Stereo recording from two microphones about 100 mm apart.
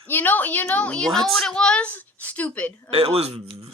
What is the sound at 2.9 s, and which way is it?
Speech, 80° right.